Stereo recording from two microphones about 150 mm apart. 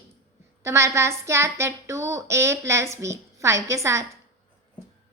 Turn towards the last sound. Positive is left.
turn(degrees=-20)  # may be behind; listen again after turning